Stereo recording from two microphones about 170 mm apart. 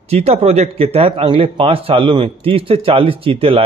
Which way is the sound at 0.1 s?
40° right (ahead or behind).